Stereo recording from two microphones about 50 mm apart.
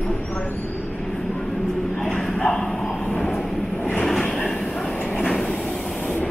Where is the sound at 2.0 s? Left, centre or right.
Centre.